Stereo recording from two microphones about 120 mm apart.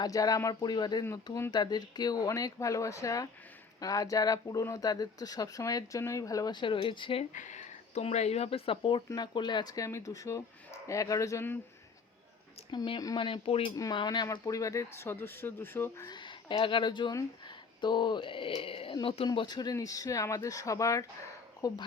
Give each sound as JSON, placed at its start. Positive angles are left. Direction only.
{"t": 0.0, "sound": "speech", "side_deg": 30}
{"t": 7.3, "sound": "speech", "side_deg": 90}
{"t": 9.0, "sound": "speech", "side_deg": 35}
{"t": 12.7, "sound": "speech", "side_deg": 40}
{"t": 13.9, "sound": "speech", "side_deg": 40}
{"t": 16.0, "sound": "speech", "side_deg": 40}